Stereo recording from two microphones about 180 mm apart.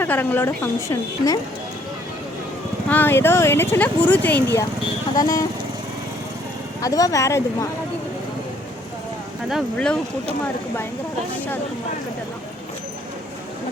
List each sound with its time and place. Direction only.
0.0 s speech: 10° left (ahead or behind)
2.9 s speech: 10° left (ahead or behind)
6.8 s speech: 20° left (ahead or behind)
9.5 s speech: centre (ahead or behind)
11.3 s speech: 10° left (ahead or behind)